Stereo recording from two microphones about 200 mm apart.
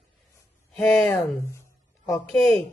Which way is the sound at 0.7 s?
10° left (ahead or behind).